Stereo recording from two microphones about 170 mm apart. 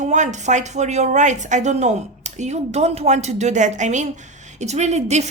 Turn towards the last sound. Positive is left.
turn(degrees=-40)  # may be behind; listen again after turning